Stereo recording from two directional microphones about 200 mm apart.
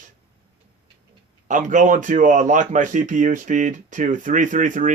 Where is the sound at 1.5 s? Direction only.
40° right (ahead or behind).